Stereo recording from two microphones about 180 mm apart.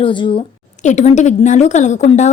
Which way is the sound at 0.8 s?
40° left (ahead or behind).